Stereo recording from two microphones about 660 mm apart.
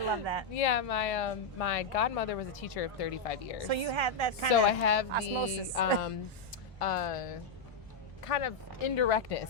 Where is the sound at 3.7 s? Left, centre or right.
Right.